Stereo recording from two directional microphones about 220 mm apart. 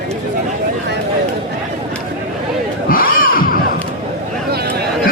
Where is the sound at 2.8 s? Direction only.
40° left (ahead or behind).